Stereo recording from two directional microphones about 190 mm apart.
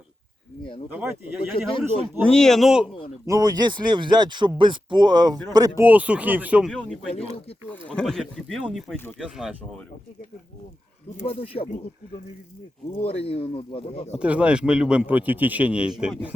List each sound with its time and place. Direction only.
0.6 s speech: 25° left (ahead or behind)
0.9 s a man's voice: 10° right (ahead or behind)
1.7 s speech: 30° left (ahead or behind)
2.2 s speech: 5° left (ahead or behind)
3.2 s speech: 20° right (ahead or behind); by 9.8 s 5° right (ahead or behind)
11.3 s speech: 30° left (ahead or behind)
13.1 s speech: 30° left (ahead or behind)
14.2 s a man's voice: 5° right (ahead or behind)